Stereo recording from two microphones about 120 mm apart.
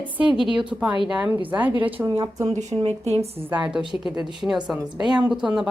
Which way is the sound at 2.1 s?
35° right (ahead or behind).